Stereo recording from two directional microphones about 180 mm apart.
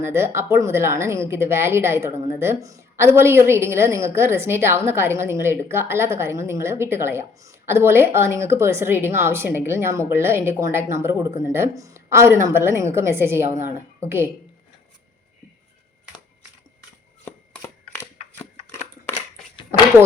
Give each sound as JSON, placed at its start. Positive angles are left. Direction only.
{"t": 0.0, "sound": "a woman's voice", "side_deg": -15}
{"t": 17.2, "sound": "shuffling cards", "side_deg": 15}